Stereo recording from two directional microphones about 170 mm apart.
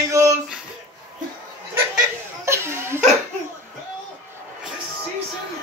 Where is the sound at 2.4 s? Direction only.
15° right (ahead or behind).